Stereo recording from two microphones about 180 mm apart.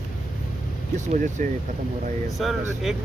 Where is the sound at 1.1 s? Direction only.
45° right (ahead or behind).